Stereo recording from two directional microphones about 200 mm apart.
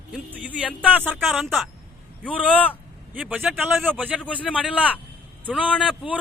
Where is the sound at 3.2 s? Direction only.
5° right (ahead or behind).